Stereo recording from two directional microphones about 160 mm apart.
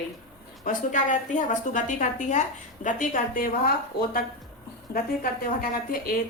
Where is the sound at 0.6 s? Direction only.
55° left (ahead or behind).